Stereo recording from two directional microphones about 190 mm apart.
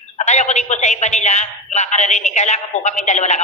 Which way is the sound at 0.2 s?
40° left (ahead or behind).